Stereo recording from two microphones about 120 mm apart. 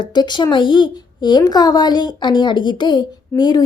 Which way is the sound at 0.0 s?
35° left (ahead or behind).